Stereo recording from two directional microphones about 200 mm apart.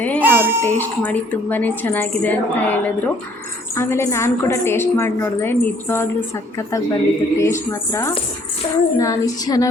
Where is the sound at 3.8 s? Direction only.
15° left (ahead or behind).